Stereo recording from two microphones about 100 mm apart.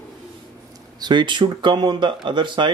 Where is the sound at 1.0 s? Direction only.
45° right (ahead or behind).